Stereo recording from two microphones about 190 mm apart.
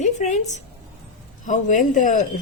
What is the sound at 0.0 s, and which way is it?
A woman's voice, 40° left (ahead or behind).